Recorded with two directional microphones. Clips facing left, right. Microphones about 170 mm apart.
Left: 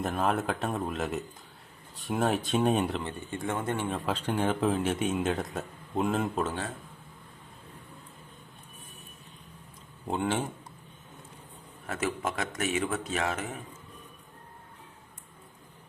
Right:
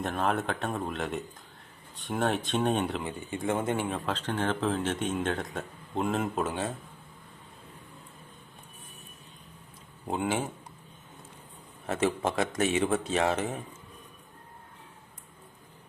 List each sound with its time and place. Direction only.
0.0 s speech: centre (ahead or behind)
3.0 s speech: 15° right (ahead or behind)
3.8 s speech: 5° left (ahead or behind)
10.1 s speech: 5° right (ahead or behind)
11.9 s a man's voice: 30° right (ahead or behind)